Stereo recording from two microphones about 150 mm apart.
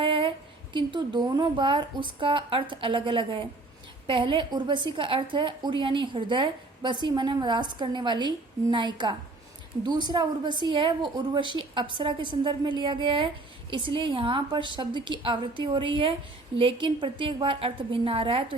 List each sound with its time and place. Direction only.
0.0 s a woman's voice: 35° right (ahead or behind)